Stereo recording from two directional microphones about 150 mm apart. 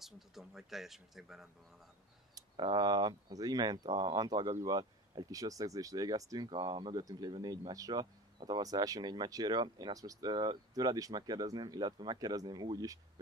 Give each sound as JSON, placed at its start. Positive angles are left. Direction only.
{"t": 0.0, "sound": "speech", "side_deg": 0}
{"t": 2.3, "sound": "speech", "side_deg": -30}